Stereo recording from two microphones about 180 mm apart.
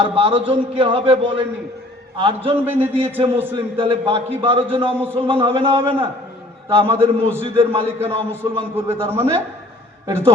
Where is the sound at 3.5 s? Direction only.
30° right (ahead or behind).